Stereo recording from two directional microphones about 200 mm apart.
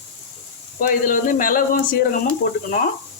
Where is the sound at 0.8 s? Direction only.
40° left (ahead or behind).